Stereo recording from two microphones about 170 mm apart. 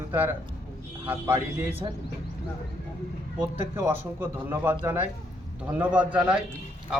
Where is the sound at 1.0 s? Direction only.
10° right (ahead or behind).